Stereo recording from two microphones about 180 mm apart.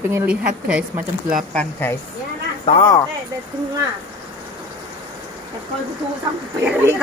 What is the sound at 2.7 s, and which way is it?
Speech, 35° left (ahead or behind).